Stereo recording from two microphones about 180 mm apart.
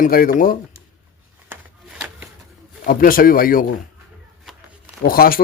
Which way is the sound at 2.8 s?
50° left (ahead or behind).